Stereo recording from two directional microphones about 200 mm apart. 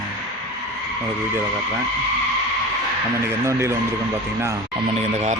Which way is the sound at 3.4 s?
15° right (ahead or behind).